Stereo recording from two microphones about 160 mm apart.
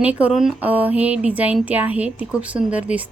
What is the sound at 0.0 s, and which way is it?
A woman's voice, 10° right (ahead or behind).